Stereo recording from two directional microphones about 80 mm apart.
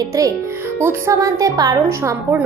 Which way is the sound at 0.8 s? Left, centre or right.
Right.